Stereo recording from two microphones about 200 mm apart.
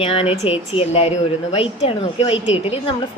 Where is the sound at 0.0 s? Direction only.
30° left (ahead or behind).